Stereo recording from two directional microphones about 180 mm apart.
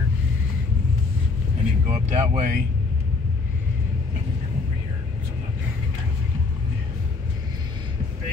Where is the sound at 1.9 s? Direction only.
40° right (ahead or behind).